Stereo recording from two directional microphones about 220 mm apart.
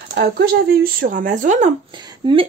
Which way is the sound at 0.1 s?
45° right (ahead or behind).